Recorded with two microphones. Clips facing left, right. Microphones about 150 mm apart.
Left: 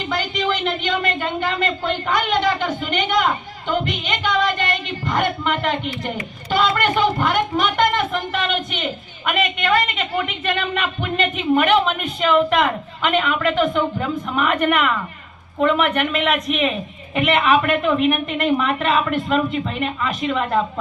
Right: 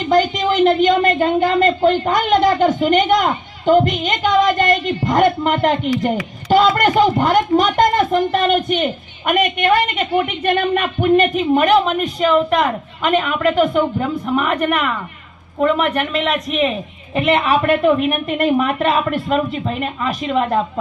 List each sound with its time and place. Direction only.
0.1 s speech: 40° right (ahead or behind)